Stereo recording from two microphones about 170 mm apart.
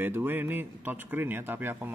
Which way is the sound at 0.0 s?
10° right (ahead or behind).